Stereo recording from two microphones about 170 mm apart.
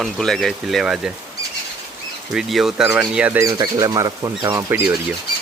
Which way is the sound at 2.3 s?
Centre (ahead or behind).